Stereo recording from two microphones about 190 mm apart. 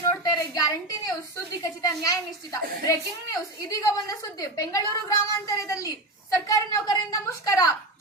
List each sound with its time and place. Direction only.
0.1 s a woman's voice: 20° left (ahead or behind)